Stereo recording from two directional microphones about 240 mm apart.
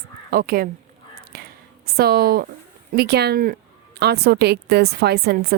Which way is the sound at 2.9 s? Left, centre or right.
Right.